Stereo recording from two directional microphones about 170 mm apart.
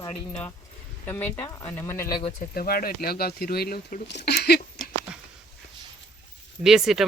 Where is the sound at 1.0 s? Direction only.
10° left (ahead or behind).